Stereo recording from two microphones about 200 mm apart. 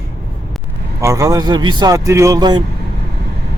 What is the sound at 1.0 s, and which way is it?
Speech, 15° right (ahead or behind).